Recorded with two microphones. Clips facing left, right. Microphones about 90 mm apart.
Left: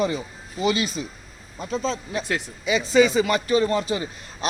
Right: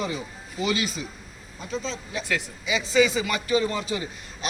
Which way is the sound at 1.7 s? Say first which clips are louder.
Left 5 dB; 45° left (ahead or behind).